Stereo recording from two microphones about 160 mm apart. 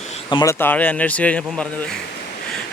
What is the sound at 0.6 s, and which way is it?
Speech, 10° left (ahead or behind).